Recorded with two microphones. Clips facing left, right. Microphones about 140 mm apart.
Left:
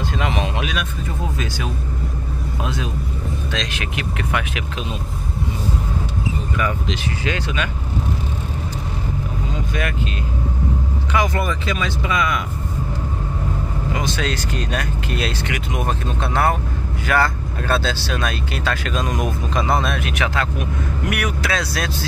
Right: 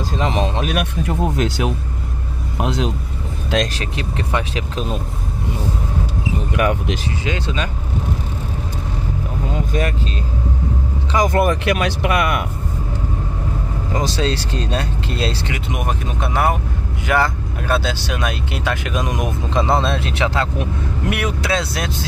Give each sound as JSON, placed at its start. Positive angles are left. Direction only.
{"t": 0.2, "sound": "speech", "side_deg": -35}
{"t": 1.0, "sound": "speech", "side_deg": -70}
{"t": 3.7, "sound": "speech", "side_deg": -30}
{"t": 6.5, "sound": "speech", "side_deg": -65}
{"t": 7.2, "sound": "speech", "side_deg": -25}
{"t": 9.5, "sound": "vehicle", "side_deg": -40}
{"t": 11.1, "sound": "speech", "side_deg": -50}
{"t": 13.9, "sound": "speech", "side_deg": -35}